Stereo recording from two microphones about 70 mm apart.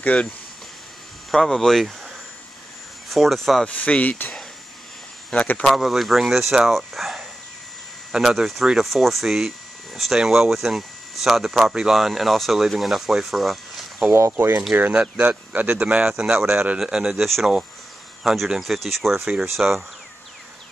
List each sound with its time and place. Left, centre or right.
0.0 s speech: centre
1.3 s speech: centre
3.6 s speech: centre
5.7 s speech: centre
14.1 s speech: right
15.0 s speech: centre
16.1 s speech: centre